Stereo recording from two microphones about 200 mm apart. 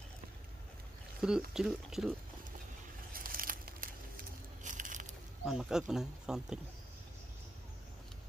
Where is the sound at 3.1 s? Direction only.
45° right (ahead or behind).